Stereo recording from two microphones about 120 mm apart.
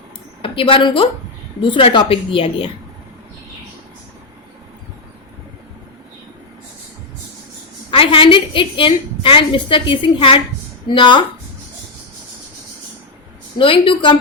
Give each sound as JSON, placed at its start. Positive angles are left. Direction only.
{"t": 0.4, "sound": "a woman's voice", "side_deg": 45}
{"t": 7.9, "sound": "a woman's voice", "side_deg": 50}
{"t": 13.6, "sound": "a woman's voice", "side_deg": 45}